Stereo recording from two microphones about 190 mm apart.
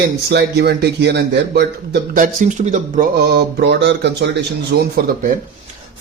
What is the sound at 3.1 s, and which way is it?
A man's voice, 60° right (ahead or behind).